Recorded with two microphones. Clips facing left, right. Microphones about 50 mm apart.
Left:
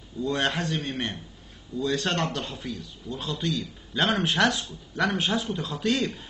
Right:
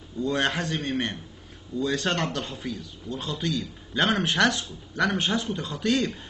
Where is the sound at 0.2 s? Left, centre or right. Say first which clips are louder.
Right 1 dB; centre.